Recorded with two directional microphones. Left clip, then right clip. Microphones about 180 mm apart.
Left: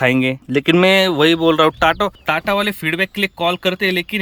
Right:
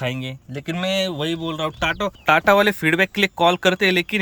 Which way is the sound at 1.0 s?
10° left (ahead or behind).